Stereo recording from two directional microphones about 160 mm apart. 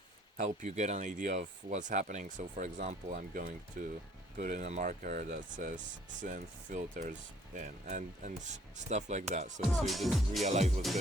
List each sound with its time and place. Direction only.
0.3 s speech: 50° right (ahead or behind)
9.6 s speech: centre (ahead or behind)
10.4 s speech: 45° right (ahead or behind)